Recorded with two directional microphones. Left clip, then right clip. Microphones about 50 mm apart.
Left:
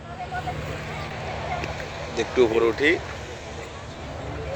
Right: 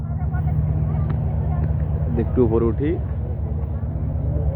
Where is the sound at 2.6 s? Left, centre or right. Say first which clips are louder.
Left 3 dB; centre.